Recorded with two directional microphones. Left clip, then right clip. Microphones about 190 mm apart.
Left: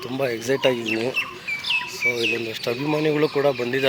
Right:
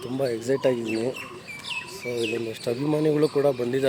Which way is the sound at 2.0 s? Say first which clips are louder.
Left 5 dB; 5° left (ahead or behind).